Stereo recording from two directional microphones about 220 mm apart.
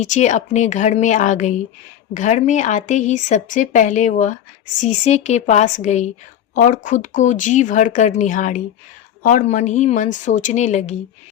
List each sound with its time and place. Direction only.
0.0 s speech: 35° left (ahead or behind)